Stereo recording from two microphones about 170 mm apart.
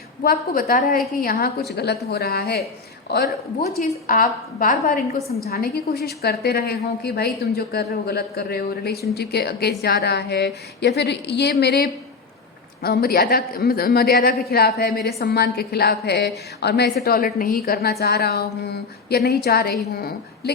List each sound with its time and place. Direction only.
0.2 s a woman's voice: 55° left (ahead or behind)
1.7 s a man's voice: 75° left (ahead or behind)
3.8 s a woman's voice: 55° left (ahead or behind)
5.5 s a man's voice: 65° left (ahead or behind)
12.8 s a man's voice: 65° left (ahead or behind)
18.0 s a man's voice: 70° left (ahead or behind)